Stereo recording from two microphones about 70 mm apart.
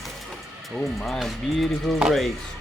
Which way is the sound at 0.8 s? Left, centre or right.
Centre.